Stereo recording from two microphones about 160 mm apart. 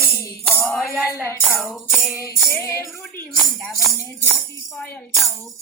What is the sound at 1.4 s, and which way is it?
Music, 5° right (ahead or behind).